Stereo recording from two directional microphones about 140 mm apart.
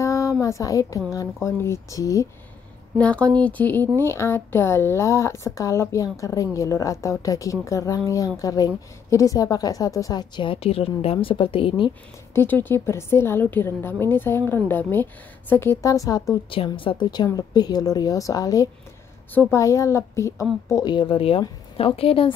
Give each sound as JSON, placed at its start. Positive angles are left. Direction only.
{"t": 0.0, "sound": "speech", "side_deg": 20}
{"t": 3.0, "sound": "a woman's voice", "side_deg": 10}
{"t": 12.4, "sound": "a woman's voice", "side_deg": 15}
{"t": 16.4, "sound": "a woman's voice", "side_deg": 40}